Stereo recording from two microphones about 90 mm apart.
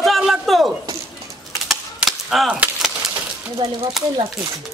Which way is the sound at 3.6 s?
65° right (ahead or behind).